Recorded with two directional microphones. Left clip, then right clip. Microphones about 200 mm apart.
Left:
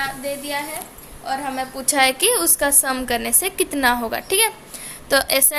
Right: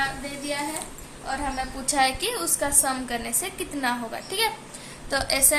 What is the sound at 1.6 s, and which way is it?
A woman's voice, 45° left (ahead or behind).